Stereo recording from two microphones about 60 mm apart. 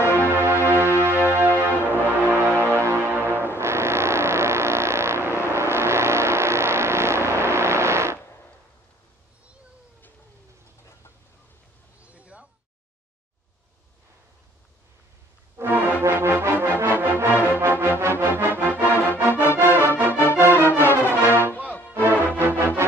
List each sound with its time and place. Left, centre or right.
0.0 s music: left
0.3 s music: right
0.6 s music: left
0.9 s music: right
12.0 s a sound: right
15.5 s music: right
19.5 s music: left
21.6 s music: left
21.9 s music: right